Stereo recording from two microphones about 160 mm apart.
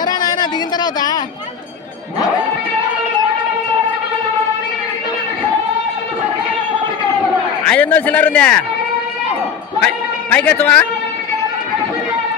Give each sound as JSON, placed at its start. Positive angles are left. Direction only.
{"t": 0.0, "sound": "a sound", "side_deg": 25}
{"t": 7.6, "sound": "a man's voice", "side_deg": 10}
{"t": 9.8, "sound": "a man's voice", "side_deg": 10}